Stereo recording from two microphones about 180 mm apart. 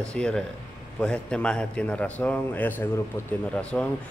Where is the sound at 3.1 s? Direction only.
25° left (ahead or behind).